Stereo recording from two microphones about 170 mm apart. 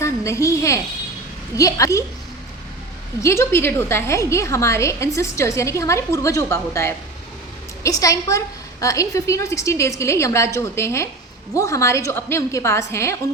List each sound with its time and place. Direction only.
0.0 s a woman's voice: 15° left (ahead or behind)
3.2 s a woman's voice: 15° left (ahead or behind)